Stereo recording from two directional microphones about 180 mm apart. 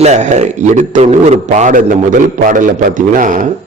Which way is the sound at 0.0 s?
40° right (ahead or behind).